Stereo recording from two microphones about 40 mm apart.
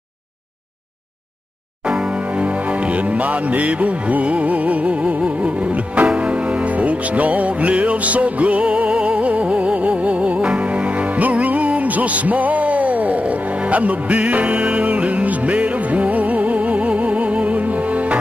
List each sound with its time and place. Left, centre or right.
1.9 s music: right